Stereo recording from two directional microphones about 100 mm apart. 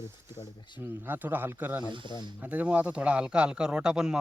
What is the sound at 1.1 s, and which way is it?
Speech, 20° right (ahead or behind).